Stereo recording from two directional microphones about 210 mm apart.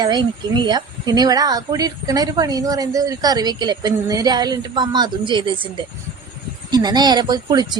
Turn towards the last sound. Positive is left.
turn(degrees=-20)  # may be behind; listen again after turning